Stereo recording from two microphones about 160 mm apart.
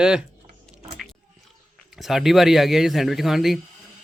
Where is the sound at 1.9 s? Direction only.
Centre (ahead or behind).